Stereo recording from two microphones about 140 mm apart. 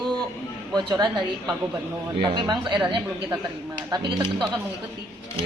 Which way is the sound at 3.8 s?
30° right (ahead or behind).